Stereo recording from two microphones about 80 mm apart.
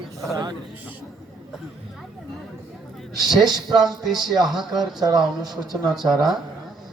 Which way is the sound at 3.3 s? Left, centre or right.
Right.